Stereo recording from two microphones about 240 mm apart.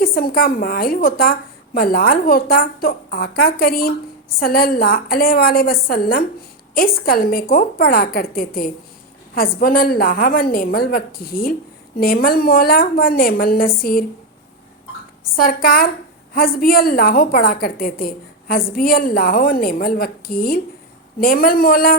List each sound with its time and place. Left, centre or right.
0.0 s a woman's voice: left
15.4 s a woman's voice: left